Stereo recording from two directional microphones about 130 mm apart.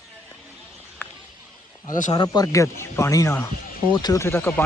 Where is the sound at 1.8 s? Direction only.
90° left.